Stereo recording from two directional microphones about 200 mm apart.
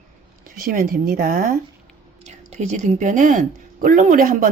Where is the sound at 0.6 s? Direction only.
45° right (ahead or behind).